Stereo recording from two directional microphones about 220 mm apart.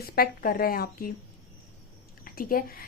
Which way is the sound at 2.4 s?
40° left (ahead or behind).